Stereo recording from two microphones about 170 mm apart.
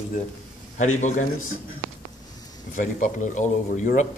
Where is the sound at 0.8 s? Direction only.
45° left (ahead or behind).